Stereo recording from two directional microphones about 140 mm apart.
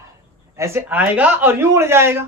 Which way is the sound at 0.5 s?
20° right (ahead or behind).